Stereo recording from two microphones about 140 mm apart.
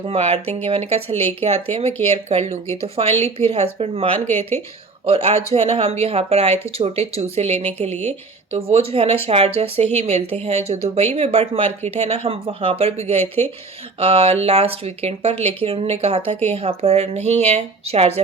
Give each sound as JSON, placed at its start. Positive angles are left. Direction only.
{"t": 0.1, "sound": "speech", "side_deg": -45}
{"t": 4.1, "sound": "speech", "side_deg": 15}
{"t": 5.0, "sound": "speech", "side_deg": -45}